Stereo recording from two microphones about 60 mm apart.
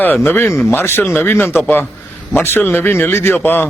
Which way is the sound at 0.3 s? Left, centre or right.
Left.